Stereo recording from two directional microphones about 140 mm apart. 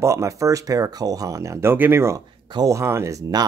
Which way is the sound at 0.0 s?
20° right (ahead or behind).